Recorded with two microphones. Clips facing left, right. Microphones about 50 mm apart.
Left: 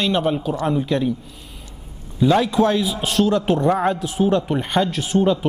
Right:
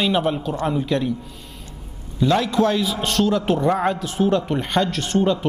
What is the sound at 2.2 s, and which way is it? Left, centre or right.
A man's voice, centre.